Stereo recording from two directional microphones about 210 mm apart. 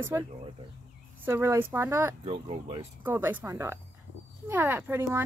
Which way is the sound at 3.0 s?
10° right (ahead or behind).